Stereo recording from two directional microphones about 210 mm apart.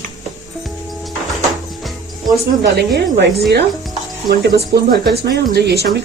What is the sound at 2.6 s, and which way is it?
Speech, 50° right (ahead or behind).